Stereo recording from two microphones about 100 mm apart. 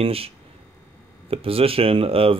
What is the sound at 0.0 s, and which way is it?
Speech, 75° right (ahead or behind).